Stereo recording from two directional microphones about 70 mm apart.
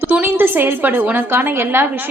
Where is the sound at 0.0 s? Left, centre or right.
Right.